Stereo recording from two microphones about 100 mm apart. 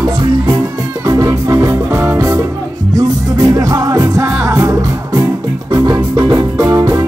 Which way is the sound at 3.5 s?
40° right (ahead or behind).